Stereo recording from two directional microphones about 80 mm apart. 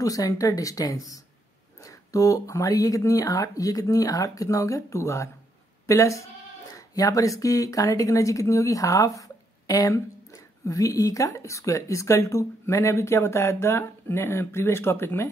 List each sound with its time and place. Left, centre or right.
0.0 s speech: left